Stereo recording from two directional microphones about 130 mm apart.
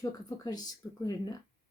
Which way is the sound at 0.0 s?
30° left (ahead or behind).